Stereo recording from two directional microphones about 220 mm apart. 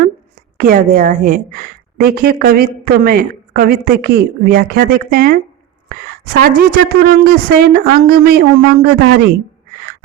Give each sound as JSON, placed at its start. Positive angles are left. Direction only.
{"t": 0.5, "sound": "a woman's voice", "side_deg": -40}